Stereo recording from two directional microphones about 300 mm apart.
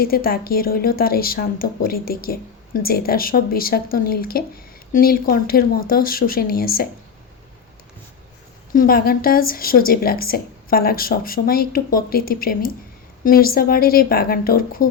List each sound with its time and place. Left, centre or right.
0.0 s a woman's voice: left
8.7 s a woman's voice: left